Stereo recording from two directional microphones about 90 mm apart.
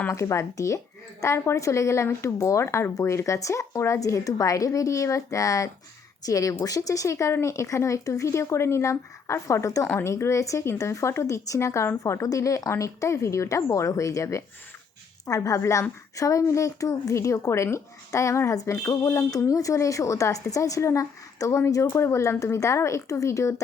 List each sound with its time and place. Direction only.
0.1 s a woman's voice: 35° left (ahead or behind)